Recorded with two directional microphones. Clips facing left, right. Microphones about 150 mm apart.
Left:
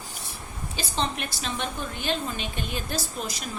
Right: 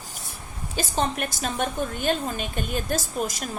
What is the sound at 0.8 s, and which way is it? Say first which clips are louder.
A woman's voice: right 4 dB; 50° right (ahead or behind).